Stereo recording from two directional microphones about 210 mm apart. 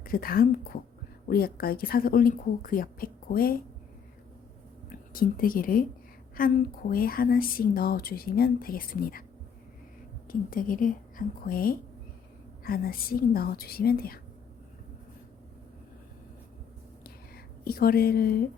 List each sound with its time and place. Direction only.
0.0 s a woman's voice: 45° left (ahead or behind)
4.9 s a woman's voice: 45° left (ahead or behind)
10.2 s a woman's voice: 40° left (ahead or behind)
17.3 s speech: 45° left (ahead or behind)